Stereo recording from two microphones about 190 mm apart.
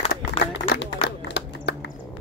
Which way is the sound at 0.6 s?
65° left (ahead or behind).